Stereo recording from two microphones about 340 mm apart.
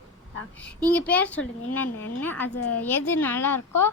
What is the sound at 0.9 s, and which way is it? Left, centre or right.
A woman's voice, centre.